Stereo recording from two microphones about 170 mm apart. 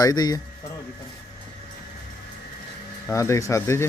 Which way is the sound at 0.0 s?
25° left (ahead or behind).